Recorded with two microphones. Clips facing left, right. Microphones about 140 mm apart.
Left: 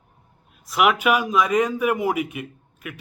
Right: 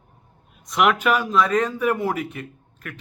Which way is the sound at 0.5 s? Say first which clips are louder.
Even; 5° left (ahead or behind).